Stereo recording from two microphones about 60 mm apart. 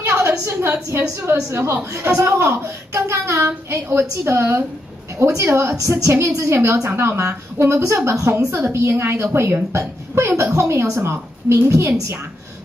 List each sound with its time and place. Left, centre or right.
0.0 s a sound: right
0.5 s a woman's voice: right
2.1 s a child's voice: right
8.5 s a child's voice: right